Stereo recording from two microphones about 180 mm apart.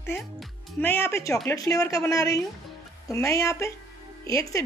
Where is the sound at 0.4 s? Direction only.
10° left (ahead or behind).